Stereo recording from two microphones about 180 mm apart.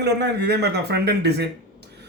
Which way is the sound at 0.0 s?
70° right (ahead or behind).